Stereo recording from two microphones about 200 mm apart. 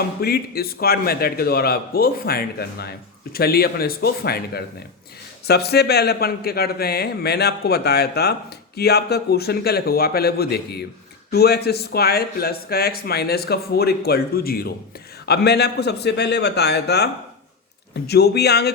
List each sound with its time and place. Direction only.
0.2 s a man's voice: 50° left (ahead or behind)